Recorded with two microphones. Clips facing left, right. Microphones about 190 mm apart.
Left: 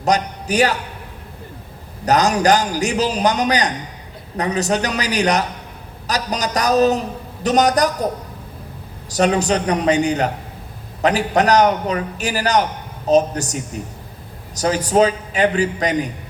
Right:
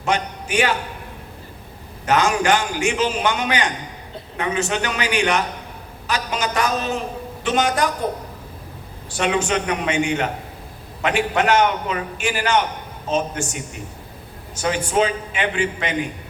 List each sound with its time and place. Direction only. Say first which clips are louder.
0.0 s a man's voice: left 4 dB; 40° left (ahead or behind)
2.0 s a man's voice: left 3 dB; 40° left (ahead or behind)
9.0 s a man's voice: left 4 dB; 40° left (ahead or behind)